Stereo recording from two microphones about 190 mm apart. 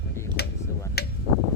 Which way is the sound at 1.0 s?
55° left (ahead or behind).